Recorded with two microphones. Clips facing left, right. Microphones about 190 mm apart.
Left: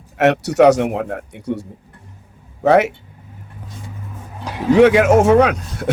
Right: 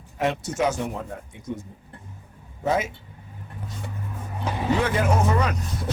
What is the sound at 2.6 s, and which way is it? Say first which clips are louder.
Speech: left 11 dB; 70° left (ahead or behind).